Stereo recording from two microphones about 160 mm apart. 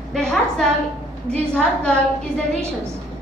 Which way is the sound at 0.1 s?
5° left (ahead or behind).